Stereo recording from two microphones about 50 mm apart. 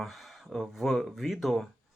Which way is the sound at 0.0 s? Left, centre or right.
Centre.